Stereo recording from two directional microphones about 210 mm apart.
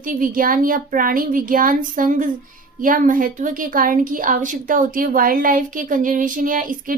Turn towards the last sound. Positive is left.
turn(degrees=-40)  # may be behind; listen again after turning